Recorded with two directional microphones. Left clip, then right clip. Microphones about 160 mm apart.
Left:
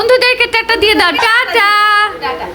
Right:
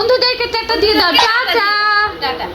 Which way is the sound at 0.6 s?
35° left (ahead or behind).